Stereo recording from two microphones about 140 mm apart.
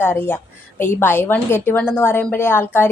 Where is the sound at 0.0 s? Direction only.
15° left (ahead or behind).